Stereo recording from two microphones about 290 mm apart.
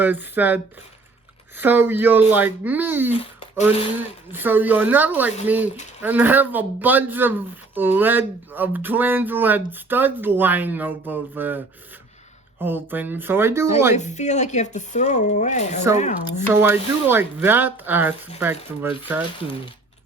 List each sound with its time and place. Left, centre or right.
0.0 s speech: centre
13.9 s speech: left
16.5 s speech: centre
19.4 s speech: centre